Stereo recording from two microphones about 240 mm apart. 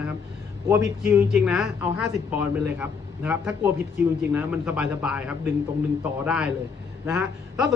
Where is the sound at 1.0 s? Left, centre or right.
Centre.